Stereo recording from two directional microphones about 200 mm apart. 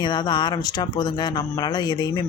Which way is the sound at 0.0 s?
20° left (ahead or behind).